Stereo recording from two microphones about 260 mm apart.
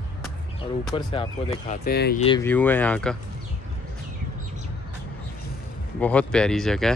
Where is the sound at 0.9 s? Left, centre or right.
Centre; by 2.1 s left.